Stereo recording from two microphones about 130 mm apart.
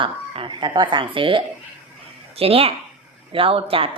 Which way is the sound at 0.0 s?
40° right (ahead or behind).